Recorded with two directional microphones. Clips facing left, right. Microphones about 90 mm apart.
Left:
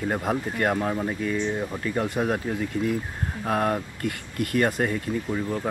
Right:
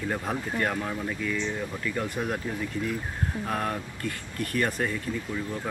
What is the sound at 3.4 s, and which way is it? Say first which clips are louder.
Speech: left 8 dB; 30° left (ahead or behind).